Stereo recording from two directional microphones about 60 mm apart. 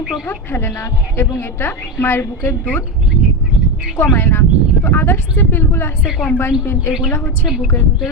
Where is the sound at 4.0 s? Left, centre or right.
Left.